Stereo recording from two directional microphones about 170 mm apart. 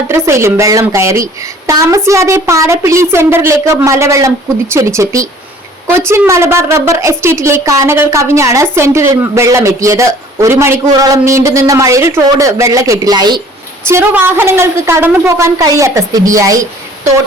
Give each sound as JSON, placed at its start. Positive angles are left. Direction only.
{"t": 0.1, "sound": "a woman's voice", "side_deg": -15}
{"t": 13.8, "sound": "a woman's voice", "side_deg": -15}